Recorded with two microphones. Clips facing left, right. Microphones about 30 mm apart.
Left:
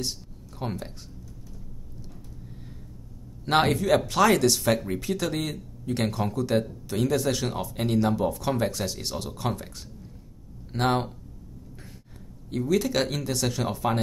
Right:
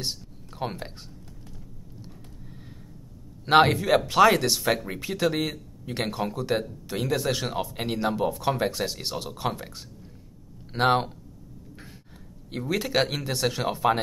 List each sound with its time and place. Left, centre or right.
0.6 s speech: right
3.4 s speech: centre
12.4 s speech: right